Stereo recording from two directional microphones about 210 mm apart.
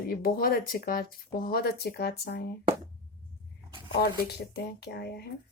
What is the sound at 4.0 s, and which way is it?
Speech, 50° left (ahead or behind).